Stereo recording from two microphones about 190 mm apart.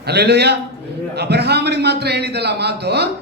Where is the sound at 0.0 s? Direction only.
60° right (ahead or behind).